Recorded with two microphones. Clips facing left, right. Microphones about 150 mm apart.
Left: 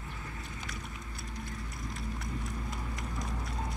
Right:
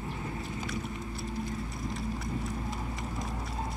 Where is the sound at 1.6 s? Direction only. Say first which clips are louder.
Right 5 dB; centre (ahead or behind).